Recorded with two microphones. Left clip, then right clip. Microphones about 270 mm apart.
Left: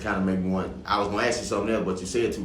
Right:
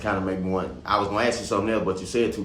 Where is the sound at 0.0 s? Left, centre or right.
Right.